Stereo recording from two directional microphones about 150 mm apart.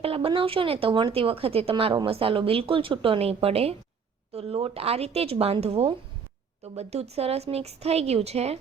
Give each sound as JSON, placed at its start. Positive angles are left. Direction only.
{"t": 0.0, "sound": "a woman's voice", "side_deg": -40}